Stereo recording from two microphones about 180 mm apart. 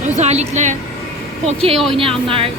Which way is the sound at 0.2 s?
40° right (ahead or behind).